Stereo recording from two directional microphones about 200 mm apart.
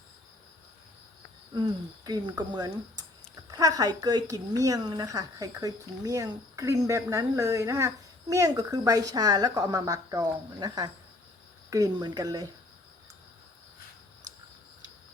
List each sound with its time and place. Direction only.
1.5 s speech: 20° right (ahead or behind)